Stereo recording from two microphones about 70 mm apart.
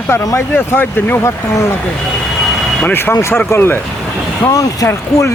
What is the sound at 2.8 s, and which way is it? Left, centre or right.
Speech, left.